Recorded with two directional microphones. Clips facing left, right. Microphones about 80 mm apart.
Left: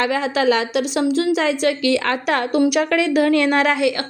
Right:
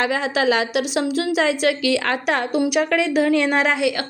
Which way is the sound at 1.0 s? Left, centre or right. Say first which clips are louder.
Left 4 dB; left.